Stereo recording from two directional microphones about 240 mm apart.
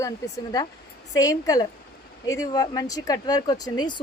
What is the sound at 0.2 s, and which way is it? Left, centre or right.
Speech, centre.